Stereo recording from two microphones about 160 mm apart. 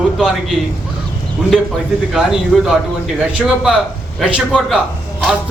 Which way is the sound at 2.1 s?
Centre (ahead or behind).